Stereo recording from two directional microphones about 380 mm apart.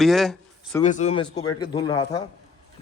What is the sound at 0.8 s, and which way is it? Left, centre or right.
Speech, centre.